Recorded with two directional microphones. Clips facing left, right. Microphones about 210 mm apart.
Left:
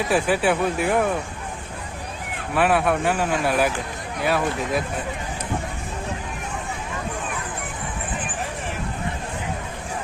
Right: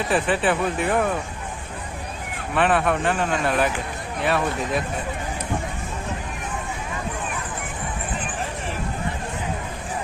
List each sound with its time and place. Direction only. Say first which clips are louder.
0.1 s a man's voice: left 1 dB; centre (ahead or behind)
2.6 s a man's voice: left 1 dB; 5° left (ahead or behind)